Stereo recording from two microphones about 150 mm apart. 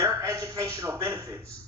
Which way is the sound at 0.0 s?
20° right (ahead or behind).